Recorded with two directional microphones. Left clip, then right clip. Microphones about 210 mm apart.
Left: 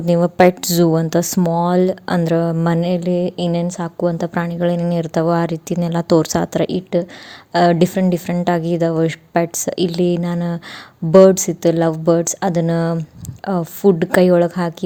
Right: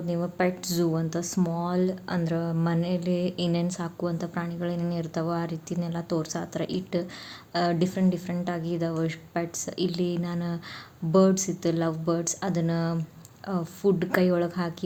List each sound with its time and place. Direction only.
0.0 s speech: 40° left (ahead or behind)